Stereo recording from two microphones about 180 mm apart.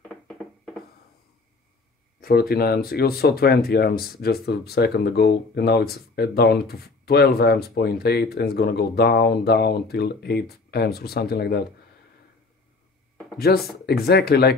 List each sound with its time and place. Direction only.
2.1 s speech: 55° left (ahead or behind)
13.5 s speech: 60° left (ahead or behind)